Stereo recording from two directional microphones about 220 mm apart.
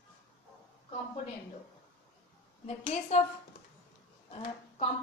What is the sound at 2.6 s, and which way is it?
Speech, 30° left (ahead or behind).